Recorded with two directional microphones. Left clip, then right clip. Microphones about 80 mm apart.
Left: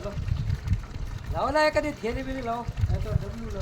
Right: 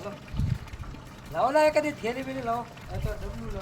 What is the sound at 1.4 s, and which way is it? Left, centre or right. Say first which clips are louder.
Speech: right 1 dB; left.